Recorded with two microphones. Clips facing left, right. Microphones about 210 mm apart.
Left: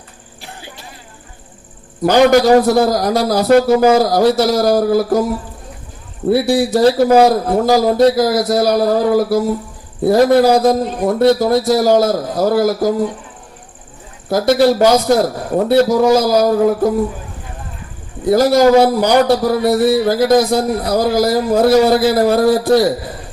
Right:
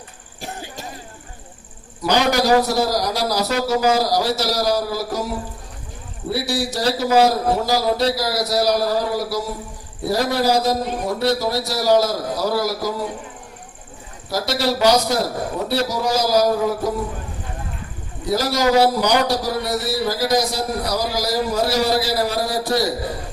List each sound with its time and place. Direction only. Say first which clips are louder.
0.4 s a sound: right 3 dB; 45° right (ahead or behind)
2.0 s a man's voice: left 8 dB; 50° left (ahead or behind)
6.3 s a man's voice: left 10 dB; 55° left (ahead or behind)
14.3 s a man's voice: left 10 dB; 50° left (ahead or behind)
18.3 s a man's voice: left 9 dB; 50° left (ahead or behind)